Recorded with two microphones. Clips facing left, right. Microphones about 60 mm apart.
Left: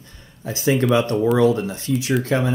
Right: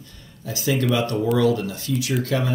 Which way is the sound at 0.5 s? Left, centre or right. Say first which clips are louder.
Left 4 dB; left.